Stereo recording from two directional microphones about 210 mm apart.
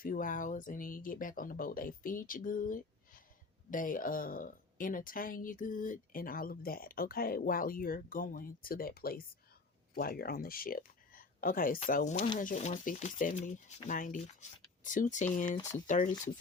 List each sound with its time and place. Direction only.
0.0 s speech: 40° left (ahead or behind)
15.5 s speech: 15° left (ahead or behind)